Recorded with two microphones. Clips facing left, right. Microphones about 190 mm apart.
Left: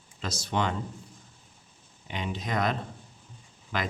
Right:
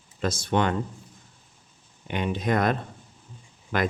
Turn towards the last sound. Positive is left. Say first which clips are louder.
# right 6 dB
turn(degrees=-55)  # may be behind; listen again after turning